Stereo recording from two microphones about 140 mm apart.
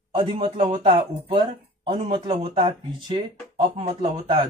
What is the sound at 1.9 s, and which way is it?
Speech, 40° right (ahead or behind).